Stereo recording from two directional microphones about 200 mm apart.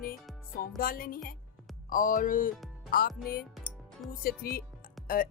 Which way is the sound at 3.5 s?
Centre (ahead or behind).